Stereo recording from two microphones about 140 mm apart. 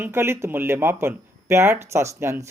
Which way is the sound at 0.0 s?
15° right (ahead or behind).